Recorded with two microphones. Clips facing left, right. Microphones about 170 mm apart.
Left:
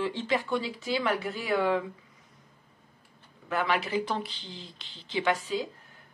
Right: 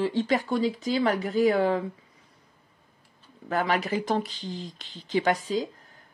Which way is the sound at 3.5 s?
40° right (ahead or behind).